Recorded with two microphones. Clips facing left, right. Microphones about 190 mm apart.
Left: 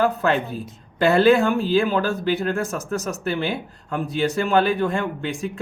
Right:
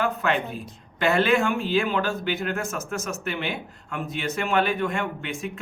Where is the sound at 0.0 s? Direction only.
35° left (ahead or behind).